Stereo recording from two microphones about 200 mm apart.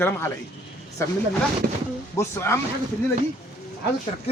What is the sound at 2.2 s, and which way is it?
Speech, 15° left (ahead or behind).